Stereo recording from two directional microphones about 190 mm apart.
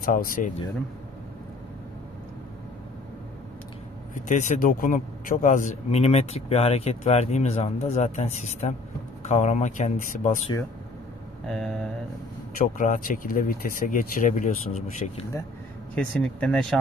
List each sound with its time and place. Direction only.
0.0 s speech: 45° left (ahead or behind)
4.1 s a man's voice: 40° left (ahead or behind)
11.4 s speech: centre (ahead or behind)
12.5 s speech: 45° left (ahead or behind)
15.9 s speech: 5° left (ahead or behind)